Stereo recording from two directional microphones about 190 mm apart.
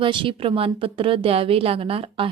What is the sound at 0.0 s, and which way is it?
Speech, 25° right (ahead or behind).